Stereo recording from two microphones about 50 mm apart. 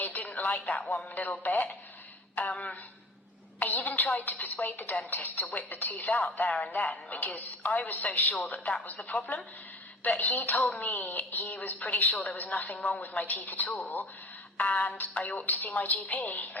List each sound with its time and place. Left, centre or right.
0.0 s a woman's voice: left
3.6 s a woman's voice: left